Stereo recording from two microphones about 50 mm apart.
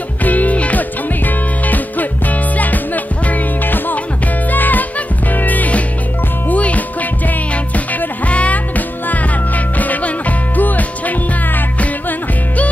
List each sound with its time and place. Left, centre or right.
0.2 s music: left